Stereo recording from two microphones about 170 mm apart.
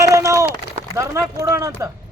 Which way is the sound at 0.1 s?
20° right (ahead or behind).